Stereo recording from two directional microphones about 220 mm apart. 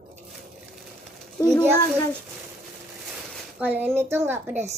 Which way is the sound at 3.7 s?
10° right (ahead or behind).